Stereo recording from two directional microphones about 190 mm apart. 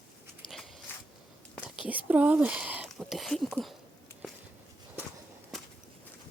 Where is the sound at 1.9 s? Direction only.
10° right (ahead or behind).